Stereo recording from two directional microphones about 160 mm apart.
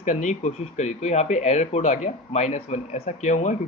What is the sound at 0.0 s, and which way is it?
Speech, 45° left (ahead or behind).